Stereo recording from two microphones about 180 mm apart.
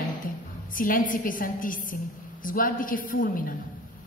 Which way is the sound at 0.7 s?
50° left (ahead or behind).